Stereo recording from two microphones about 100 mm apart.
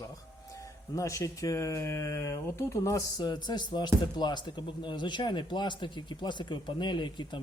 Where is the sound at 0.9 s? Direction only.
30° left (ahead or behind).